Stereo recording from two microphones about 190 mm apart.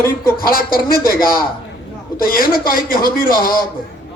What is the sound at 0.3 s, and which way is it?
A man's voice, 50° left (ahead or behind).